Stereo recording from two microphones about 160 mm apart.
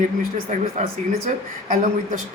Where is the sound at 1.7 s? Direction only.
55° right (ahead or behind).